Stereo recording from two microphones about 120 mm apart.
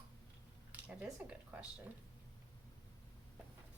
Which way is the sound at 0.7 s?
10° right (ahead or behind).